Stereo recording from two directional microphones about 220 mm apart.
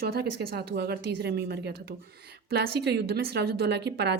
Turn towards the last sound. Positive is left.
turn(degrees=-50)  # may be behind; listen again after turning